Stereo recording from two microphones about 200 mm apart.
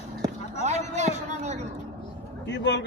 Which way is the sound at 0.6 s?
35° right (ahead or behind).